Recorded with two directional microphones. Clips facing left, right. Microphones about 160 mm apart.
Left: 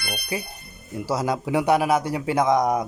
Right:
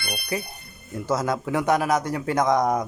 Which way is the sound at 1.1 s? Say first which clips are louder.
Left 1 dB; 10° left (ahead or behind).